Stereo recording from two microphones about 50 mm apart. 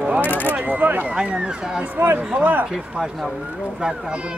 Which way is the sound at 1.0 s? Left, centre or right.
Right.